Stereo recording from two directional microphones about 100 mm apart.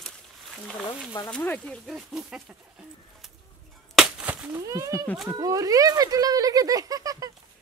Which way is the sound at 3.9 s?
10° right (ahead or behind).